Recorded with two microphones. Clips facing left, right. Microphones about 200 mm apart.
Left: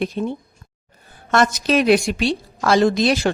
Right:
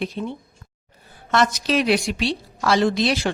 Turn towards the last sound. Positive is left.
turn(degrees=45)  # may be behind; listen again after turning